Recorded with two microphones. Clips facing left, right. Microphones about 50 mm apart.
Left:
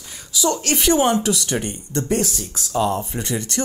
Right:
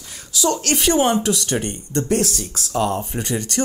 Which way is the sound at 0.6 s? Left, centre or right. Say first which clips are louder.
Right 1 dB; centre.